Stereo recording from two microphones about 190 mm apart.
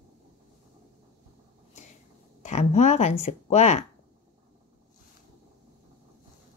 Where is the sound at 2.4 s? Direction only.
35° left (ahead or behind).